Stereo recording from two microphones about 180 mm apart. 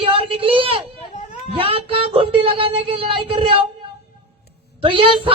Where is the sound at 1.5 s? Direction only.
30° right (ahead or behind).